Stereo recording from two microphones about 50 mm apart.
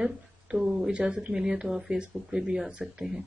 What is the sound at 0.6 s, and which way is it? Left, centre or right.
Speech, centre.